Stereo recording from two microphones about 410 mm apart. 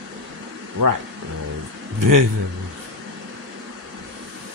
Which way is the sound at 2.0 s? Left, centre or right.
Right.